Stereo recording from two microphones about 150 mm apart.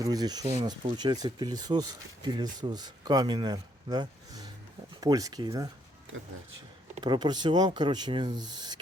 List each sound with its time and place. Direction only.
0.0 s speech: 25° right (ahead or behind)
7.0 s speech: 30° right (ahead or behind)